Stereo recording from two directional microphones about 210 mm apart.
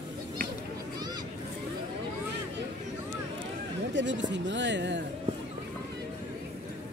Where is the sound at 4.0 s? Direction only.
60° right (ahead or behind).